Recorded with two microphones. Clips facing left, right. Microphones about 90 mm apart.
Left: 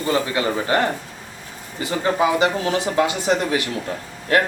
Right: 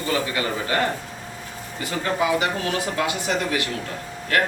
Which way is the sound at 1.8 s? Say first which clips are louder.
Left 4 dB; 25° left (ahead or behind).